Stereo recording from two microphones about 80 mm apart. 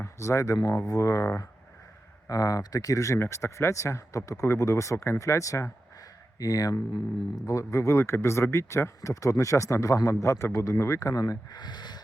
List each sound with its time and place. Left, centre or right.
0.0 s speech: left
6.4 s speech: left
11.5 s a sound: left